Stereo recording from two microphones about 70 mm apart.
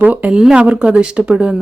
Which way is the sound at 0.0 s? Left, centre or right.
Right.